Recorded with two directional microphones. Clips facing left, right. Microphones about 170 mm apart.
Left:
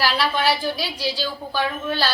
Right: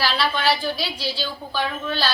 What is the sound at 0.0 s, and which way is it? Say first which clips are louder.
A woman's voice: left 1 dB; 10° left (ahead or behind).